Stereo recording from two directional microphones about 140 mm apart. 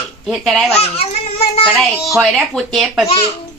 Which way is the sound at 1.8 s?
Centre (ahead or behind).